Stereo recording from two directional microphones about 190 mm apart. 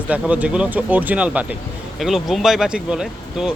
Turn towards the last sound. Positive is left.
turn(degrees=-5)  # may be behind; listen again after turning